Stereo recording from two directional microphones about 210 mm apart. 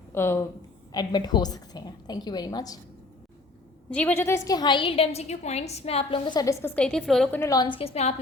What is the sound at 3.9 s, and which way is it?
A woman's voice, 5° left (ahead or behind).